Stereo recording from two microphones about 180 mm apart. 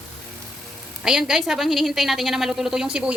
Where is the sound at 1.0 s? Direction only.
5° right (ahead or behind).